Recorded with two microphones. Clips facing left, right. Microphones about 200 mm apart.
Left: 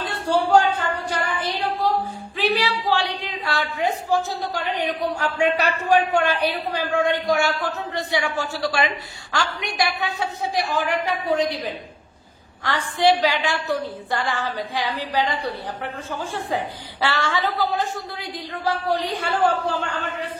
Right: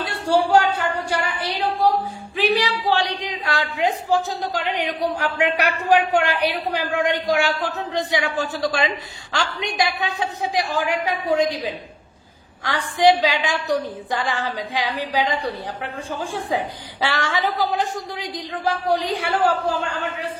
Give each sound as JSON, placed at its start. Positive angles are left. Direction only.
{"t": 0.0, "sound": "a sound", "side_deg": -10}
{"t": 4.7, "sound": "a woman's voice", "side_deg": -15}
{"t": 9.8, "sound": "a woman's voice", "side_deg": -15}